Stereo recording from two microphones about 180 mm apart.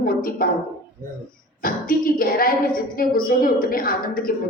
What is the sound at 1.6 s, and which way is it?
A woman's voice, 50° left (ahead or behind).